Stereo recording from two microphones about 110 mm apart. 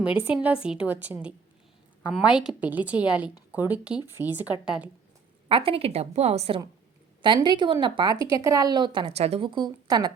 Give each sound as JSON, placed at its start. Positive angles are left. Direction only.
{"t": 0.2, "sound": "a woman's voice", "side_deg": -15}
{"t": 5.5, "sound": "a woman's voice", "side_deg": -55}
{"t": 7.4, "sound": "speech", "side_deg": -45}
{"t": 9.0, "sound": "a woman's voice", "side_deg": -70}
{"t": 9.5, "sound": "speech", "side_deg": -45}